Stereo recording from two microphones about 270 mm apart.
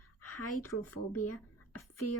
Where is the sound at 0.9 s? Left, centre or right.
Left.